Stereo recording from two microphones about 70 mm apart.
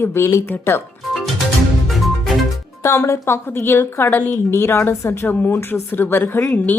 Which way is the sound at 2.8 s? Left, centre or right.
Left.